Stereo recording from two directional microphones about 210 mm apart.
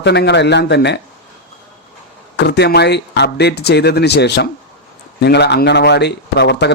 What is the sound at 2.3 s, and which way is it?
Speech, 55° left (ahead or behind).